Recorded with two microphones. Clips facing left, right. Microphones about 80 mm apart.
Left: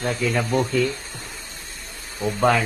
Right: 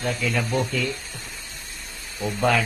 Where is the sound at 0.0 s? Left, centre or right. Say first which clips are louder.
Left 2 dB; left.